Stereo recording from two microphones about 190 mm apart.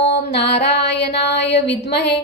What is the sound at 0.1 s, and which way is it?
Mantra, 60° left (ahead or behind).